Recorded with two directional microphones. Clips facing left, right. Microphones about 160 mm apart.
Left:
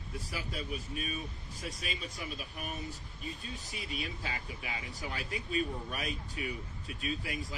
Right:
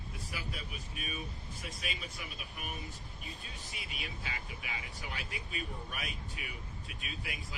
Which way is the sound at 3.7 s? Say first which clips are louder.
Left 6 dB; 40° left (ahead or behind).